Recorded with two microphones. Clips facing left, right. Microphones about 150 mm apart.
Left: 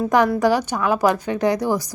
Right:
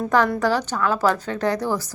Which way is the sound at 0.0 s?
15° left (ahead or behind).